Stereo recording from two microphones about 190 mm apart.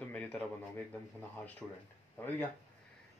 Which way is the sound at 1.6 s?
5° left (ahead or behind).